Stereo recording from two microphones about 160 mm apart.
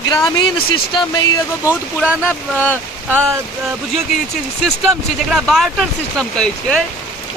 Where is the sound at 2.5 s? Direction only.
10° left (ahead or behind).